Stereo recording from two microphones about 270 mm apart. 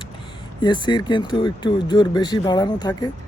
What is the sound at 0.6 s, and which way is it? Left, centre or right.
Speech, centre.